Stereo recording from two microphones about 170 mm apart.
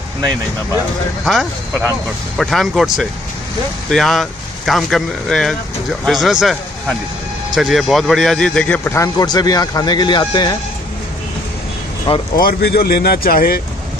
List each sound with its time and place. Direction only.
1.2 s speech: centre (ahead or behind); by 10.6 s 25° left (ahead or behind)
12.4 s speech: 60° left (ahead or behind)